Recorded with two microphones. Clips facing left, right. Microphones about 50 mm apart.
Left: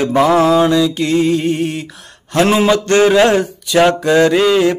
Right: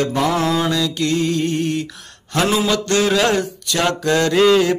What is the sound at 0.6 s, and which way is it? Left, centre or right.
Mantra, centre.